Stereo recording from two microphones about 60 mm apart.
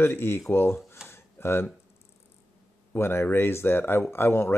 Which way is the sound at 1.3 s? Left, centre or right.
Left.